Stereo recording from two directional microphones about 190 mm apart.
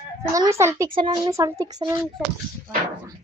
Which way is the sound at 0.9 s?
25° right (ahead or behind).